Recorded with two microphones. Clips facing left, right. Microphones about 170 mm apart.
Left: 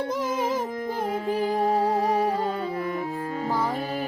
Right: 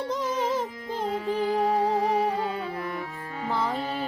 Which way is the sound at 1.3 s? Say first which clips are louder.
Left 1 dB; 40° left (ahead or behind).